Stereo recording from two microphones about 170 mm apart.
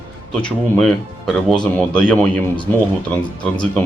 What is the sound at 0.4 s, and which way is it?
Speech, centre (ahead or behind).